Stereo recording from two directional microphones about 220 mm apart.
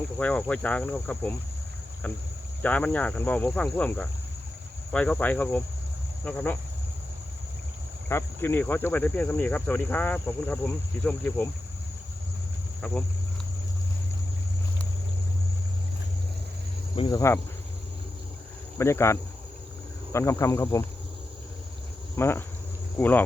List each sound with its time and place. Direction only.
0.2 s speech: 5° left (ahead or behind)
8.1 s speech: 10° left (ahead or behind)
12.8 s speech: 5° left (ahead or behind)
16.9 s speech: 20° left (ahead or behind)
18.8 s speech: 10° left (ahead or behind)
22.1 s speech: 10° left (ahead or behind)